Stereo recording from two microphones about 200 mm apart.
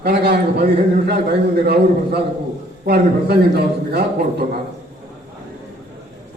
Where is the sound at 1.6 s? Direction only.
55° right (ahead or behind).